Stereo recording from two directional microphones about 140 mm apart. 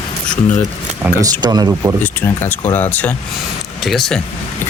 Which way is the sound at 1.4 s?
30° right (ahead or behind).